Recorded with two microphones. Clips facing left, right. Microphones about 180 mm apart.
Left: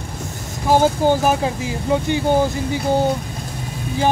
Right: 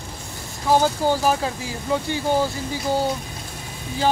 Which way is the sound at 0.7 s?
20° left (ahead or behind).